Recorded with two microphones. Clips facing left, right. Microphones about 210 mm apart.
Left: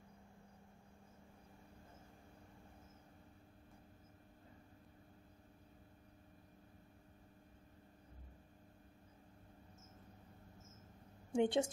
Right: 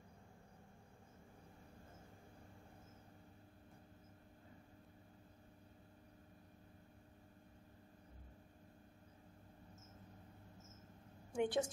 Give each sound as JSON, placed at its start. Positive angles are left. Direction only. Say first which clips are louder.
{"t": 11.3, "sound": "speech", "louder": "left 3 dB", "side_deg": 25}